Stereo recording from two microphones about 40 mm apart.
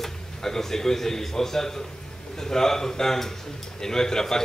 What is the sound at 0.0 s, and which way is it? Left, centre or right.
A man's voice, centre.